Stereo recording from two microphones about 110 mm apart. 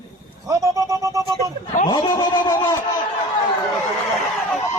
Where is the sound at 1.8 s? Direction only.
40° left (ahead or behind).